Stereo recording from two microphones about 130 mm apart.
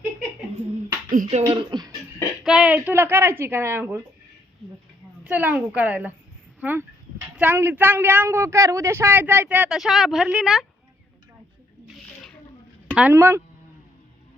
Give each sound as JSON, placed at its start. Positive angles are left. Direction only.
{"t": 1.1, "sound": "music", "side_deg": -75}
{"t": 1.7, "sound": "beatboxing", "side_deg": -30}
{"t": 2.4, "sound": "speech", "side_deg": -5}
{"t": 5.2, "sound": "speech", "side_deg": -10}
{"t": 9.7, "sound": "speech", "side_deg": 0}
{"t": 12.9, "sound": "speech", "side_deg": -10}
{"t": 13.1, "sound": "speech", "side_deg": -20}